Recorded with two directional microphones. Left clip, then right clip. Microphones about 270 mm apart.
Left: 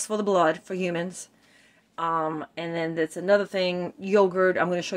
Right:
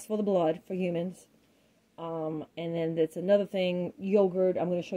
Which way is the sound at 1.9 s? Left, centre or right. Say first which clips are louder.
Left 9 dB; left.